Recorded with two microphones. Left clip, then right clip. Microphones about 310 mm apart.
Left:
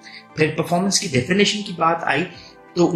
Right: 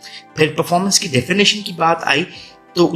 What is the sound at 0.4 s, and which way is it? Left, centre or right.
Speech, right.